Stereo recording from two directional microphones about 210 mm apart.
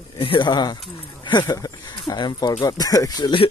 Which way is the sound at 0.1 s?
25° left (ahead or behind).